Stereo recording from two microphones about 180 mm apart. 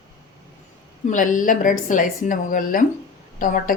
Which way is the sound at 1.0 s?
45° left (ahead or behind).